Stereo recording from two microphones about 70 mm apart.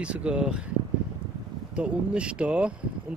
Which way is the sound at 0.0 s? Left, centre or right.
Centre.